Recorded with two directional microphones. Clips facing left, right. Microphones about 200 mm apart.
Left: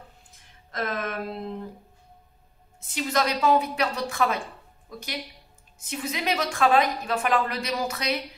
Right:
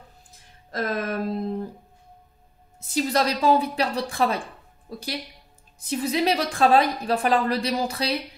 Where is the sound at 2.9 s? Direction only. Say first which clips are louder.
Right 3 dB; 35° right (ahead or behind).